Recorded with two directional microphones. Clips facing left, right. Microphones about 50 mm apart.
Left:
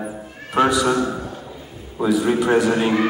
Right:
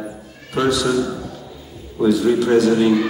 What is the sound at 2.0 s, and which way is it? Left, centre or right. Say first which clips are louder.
A man's voice: right 2 dB; left.